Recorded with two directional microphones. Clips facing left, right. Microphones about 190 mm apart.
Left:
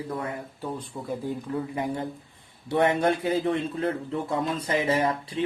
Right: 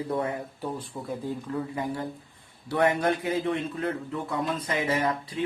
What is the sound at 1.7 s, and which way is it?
Speech, 20° left (ahead or behind).